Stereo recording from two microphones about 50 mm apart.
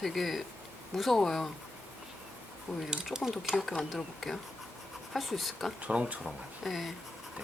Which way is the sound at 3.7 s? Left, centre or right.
Centre.